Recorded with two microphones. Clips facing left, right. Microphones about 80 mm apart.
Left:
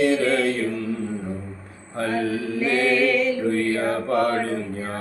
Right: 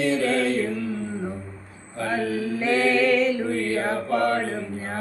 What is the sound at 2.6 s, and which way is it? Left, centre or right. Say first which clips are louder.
A capella: left 1 dB; right.